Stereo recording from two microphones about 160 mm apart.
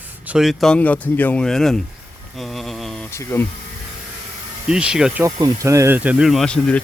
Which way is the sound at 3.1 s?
15° left (ahead or behind).